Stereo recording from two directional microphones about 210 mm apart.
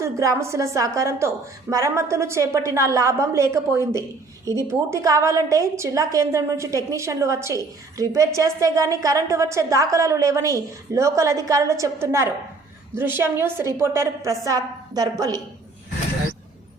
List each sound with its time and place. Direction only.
0.0 s a woman's voice: 15° right (ahead or behind)